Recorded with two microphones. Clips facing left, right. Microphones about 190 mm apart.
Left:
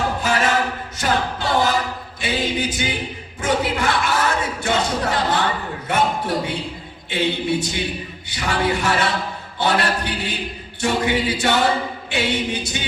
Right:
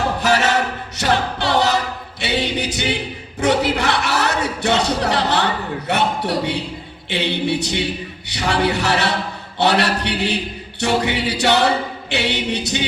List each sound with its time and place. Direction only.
0.2 s a capella: 70° right (ahead or behind)
2.2 s choir: 70° right (ahead or behind)
3.4 s speech: 70° right (ahead or behind)
7.1 s a capella: 70° right (ahead or behind)